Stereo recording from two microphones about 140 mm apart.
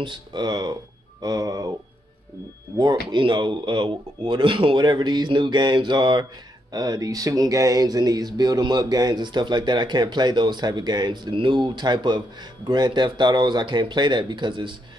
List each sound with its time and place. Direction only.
0.0 s speech: 35° right (ahead or behind)
1.2 s a sound: 25° right (ahead or behind)
3.1 s speech: 35° right (ahead or behind)